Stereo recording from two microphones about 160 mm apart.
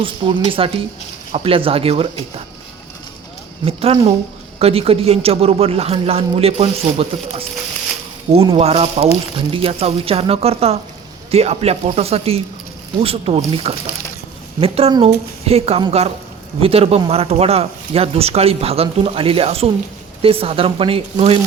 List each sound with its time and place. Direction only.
0.0 s speech: 35° right (ahead or behind)
3.7 s speech: 40° right (ahead or behind)
8.5 s speech: 40° right (ahead or behind)